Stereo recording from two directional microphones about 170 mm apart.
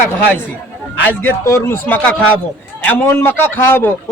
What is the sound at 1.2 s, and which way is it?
A man's voice, 15° left (ahead or behind).